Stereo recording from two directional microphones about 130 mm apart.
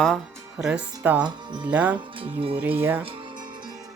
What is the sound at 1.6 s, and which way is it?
Speech, 10° right (ahead or behind).